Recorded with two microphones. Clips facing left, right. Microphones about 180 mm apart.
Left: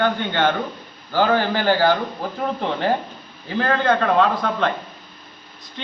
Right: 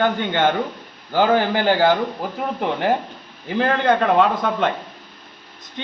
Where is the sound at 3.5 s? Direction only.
15° right (ahead or behind).